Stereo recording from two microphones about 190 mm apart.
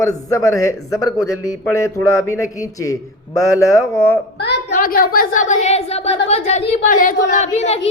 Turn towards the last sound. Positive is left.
turn(degrees=35)  # may be behind; listen again after turning